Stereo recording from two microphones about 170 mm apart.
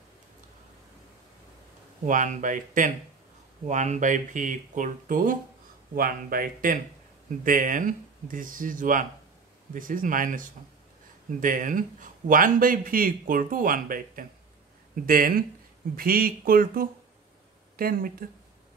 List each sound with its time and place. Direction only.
2.0 s a man's voice: 50° right (ahead or behind)